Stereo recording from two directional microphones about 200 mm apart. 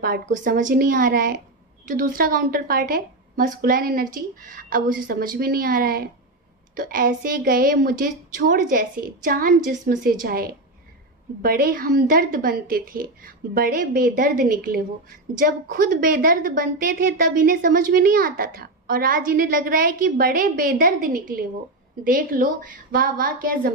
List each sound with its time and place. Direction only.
0.0 s a woman's voice: 45° right (ahead or behind)